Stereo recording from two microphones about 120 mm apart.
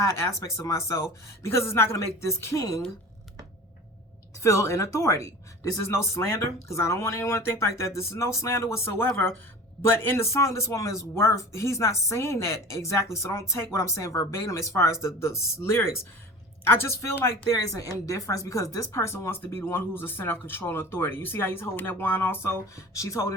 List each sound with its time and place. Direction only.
0.0 s speech: 25° left (ahead or behind)
4.4 s speech: 25° left (ahead or behind)